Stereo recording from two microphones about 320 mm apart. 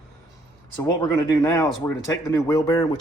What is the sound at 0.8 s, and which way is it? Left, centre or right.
Speech, centre.